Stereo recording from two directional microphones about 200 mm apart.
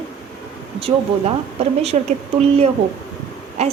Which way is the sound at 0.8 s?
30° right (ahead or behind).